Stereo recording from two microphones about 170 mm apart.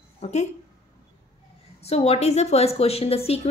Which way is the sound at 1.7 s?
35° left (ahead or behind).